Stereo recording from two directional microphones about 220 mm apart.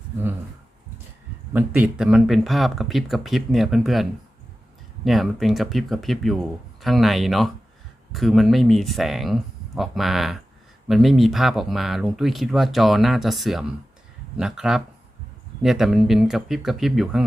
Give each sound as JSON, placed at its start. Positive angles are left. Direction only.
{"t": 1.5, "sound": "speech", "side_deg": -5}
{"t": 5.0, "sound": "speech", "side_deg": 0}